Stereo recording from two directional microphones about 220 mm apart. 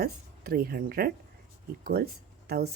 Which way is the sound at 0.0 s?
45° right (ahead or behind).